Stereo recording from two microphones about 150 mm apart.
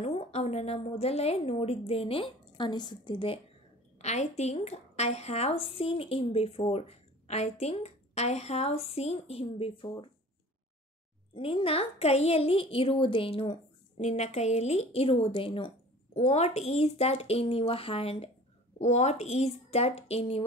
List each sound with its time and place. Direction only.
0.0 s a woman's voice: 45° left (ahead or behind)
4.0 s a woman's voice: 50° left (ahead or behind)
11.3 s a woman's voice: 35° left (ahead or behind)